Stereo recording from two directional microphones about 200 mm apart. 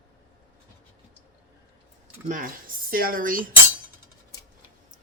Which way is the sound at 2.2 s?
40° right (ahead or behind).